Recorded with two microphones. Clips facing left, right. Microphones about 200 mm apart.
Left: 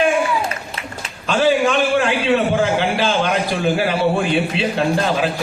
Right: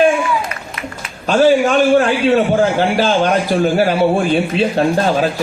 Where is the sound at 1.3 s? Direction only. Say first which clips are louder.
Right 4 dB; 40° right (ahead or behind).